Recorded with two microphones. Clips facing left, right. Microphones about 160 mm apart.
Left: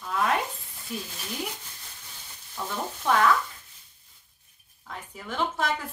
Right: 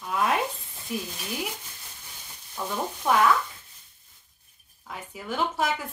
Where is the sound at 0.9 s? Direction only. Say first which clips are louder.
Right 3 dB; 10° right (ahead or behind).